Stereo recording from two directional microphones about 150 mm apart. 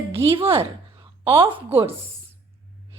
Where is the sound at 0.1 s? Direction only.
40° right (ahead or behind).